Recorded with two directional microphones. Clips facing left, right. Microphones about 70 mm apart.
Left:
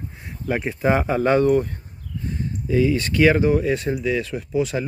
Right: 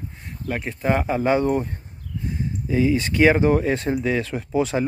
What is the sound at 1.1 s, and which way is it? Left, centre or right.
Speech, centre.